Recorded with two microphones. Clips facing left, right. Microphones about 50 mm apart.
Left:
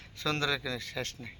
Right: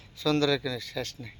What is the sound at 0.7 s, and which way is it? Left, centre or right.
Speech, left.